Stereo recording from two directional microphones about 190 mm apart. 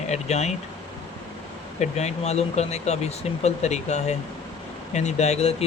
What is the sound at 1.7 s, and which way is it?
Speech, 35° left (ahead or behind).